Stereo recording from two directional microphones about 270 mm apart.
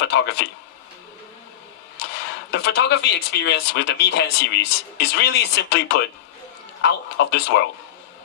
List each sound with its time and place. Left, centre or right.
0.0 s a man's voice: left
2.5 s speech: left